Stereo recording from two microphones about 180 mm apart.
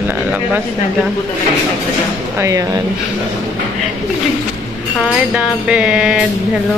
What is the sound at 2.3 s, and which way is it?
Speech, 15° right (ahead or behind).